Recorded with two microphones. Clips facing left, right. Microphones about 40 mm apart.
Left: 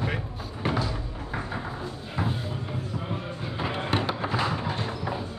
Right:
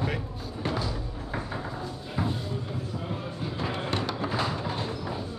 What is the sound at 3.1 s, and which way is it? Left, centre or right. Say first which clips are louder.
Music: left 1 dB; left.